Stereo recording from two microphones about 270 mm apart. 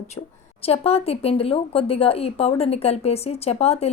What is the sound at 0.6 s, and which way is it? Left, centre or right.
Speech, left.